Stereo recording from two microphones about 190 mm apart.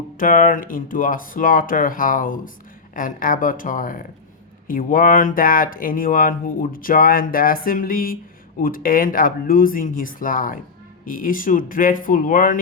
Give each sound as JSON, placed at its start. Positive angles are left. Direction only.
{"t": 0.2, "sound": "speech", "side_deg": 45}